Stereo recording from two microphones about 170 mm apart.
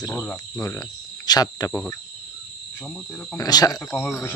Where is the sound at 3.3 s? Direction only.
20° left (ahead or behind).